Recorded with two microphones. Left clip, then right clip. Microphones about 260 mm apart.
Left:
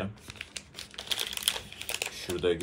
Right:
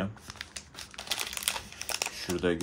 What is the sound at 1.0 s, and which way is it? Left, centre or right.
Typing, centre.